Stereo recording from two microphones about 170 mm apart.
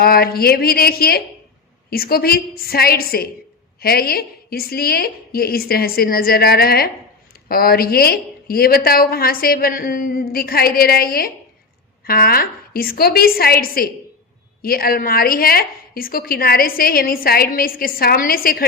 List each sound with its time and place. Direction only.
0.0 s a woman's voice: 65° left (ahead or behind)